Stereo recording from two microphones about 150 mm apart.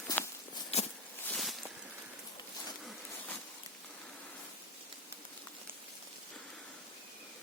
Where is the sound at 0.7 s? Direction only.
45° left (ahead or behind).